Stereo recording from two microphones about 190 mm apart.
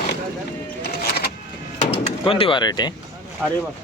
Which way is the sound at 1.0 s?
55° left (ahead or behind).